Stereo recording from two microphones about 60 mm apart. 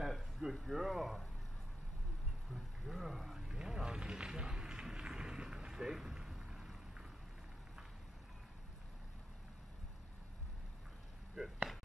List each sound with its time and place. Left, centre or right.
0.0 s speech: centre
2.5 s vehicle: centre
11.3 s a sound: centre